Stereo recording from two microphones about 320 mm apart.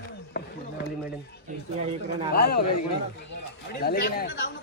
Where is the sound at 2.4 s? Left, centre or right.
Left.